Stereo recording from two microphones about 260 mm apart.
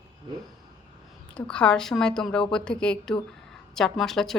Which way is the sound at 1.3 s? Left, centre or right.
Centre.